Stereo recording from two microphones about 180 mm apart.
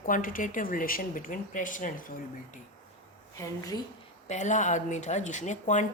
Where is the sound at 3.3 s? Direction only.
20° left (ahead or behind).